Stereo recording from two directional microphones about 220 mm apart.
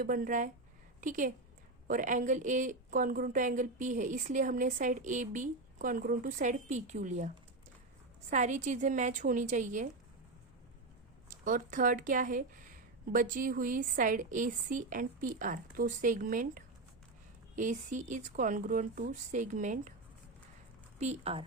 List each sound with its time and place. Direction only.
0.0 s a woman's voice: 40° right (ahead or behind)
8.3 s a woman's voice: 35° right (ahead or behind)
11.3 s a woman's voice: 35° right (ahead or behind)
21.0 s speech: 30° right (ahead or behind)